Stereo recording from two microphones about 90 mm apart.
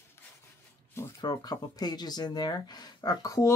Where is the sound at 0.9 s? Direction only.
30° left (ahead or behind).